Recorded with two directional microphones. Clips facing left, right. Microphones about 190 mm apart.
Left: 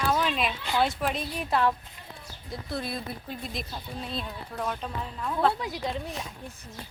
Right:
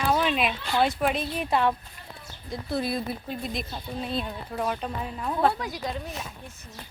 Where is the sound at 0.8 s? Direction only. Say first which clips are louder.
Right 3 dB; 5° right (ahead or behind).